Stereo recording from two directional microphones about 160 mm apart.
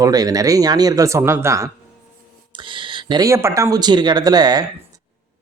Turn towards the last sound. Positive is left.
turn(degrees=-25)  # may be behind; listen again after turning